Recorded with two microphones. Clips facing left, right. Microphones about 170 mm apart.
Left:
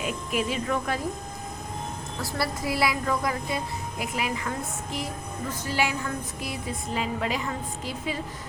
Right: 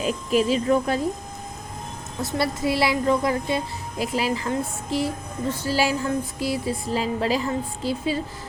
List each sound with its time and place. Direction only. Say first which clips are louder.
0.0 s speech: right 7 dB; 30° right (ahead or behind)
2.2 s a woman's voice: right 6 dB; 25° right (ahead or behind)